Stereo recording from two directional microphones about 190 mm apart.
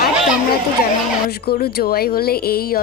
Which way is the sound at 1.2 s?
55° left (ahead or behind).